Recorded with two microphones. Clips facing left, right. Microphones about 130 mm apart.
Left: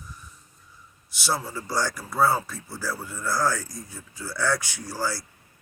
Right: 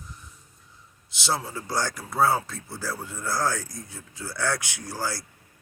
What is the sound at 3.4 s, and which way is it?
Speech, 55° right (ahead or behind).